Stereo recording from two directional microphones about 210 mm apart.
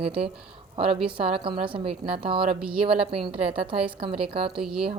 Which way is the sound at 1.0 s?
25° right (ahead or behind).